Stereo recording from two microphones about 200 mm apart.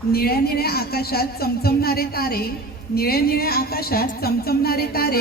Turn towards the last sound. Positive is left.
turn(degrees=50)  # may be behind; listen again after turning